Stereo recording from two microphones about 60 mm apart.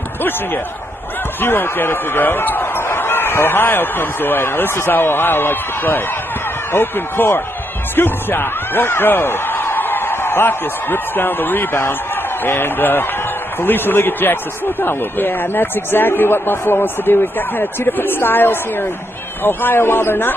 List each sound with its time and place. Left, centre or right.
1.4 s speech: left